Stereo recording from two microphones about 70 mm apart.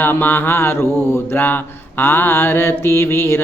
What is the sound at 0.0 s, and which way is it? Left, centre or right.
Mantra, left.